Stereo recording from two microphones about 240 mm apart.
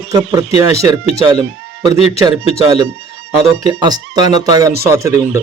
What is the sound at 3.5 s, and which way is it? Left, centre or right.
Speech, centre.